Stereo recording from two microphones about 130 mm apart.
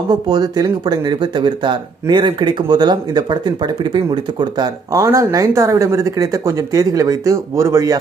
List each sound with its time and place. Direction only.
0.1 s speech: 35° right (ahead or behind)